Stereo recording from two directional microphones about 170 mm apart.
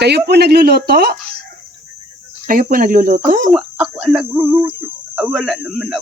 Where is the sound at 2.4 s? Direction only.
55° right (ahead or behind).